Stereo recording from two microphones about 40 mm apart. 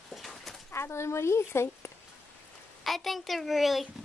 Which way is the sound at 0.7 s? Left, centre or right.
Left.